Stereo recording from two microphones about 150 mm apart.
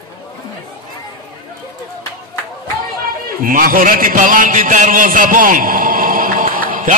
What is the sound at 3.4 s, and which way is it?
A man's voice, 70° right (ahead or behind).